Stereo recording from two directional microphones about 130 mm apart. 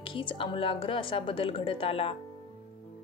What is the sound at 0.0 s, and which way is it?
A woman's voice, 40° left (ahead or behind).